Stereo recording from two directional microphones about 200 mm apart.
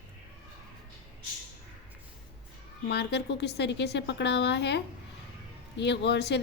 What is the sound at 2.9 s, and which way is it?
A woman's voice, 55° left (ahead or behind).